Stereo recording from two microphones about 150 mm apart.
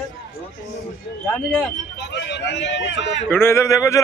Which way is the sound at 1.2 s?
10° left (ahead or behind).